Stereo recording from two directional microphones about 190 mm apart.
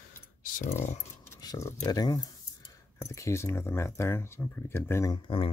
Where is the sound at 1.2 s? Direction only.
15° left (ahead or behind).